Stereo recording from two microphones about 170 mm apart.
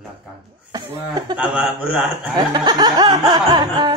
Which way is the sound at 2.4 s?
25° right (ahead or behind).